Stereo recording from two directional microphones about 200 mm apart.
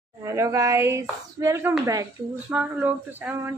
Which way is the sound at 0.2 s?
15° right (ahead or behind).